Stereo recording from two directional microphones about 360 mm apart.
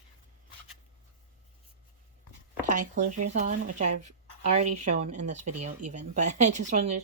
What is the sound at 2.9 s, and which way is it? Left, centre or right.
Speech, right.